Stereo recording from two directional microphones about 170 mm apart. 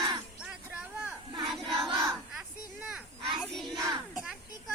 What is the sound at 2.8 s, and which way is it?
Children playing, 5° right (ahead or behind).